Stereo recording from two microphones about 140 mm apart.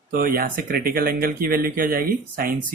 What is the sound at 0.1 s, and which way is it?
Speech, 85° right.